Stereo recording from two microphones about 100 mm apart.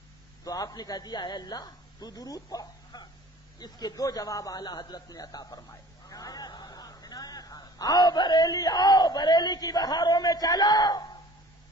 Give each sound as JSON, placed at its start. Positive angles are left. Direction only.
{"t": 0.4, "sound": "a man's voice", "side_deg": 40}